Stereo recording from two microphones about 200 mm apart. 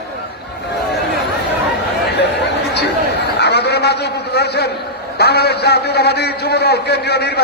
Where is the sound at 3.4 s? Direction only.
55° left (ahead or behind).